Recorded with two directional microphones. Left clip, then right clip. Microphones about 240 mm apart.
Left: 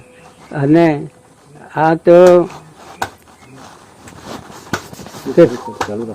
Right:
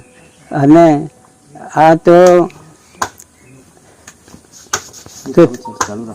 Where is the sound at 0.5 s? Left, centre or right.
Right.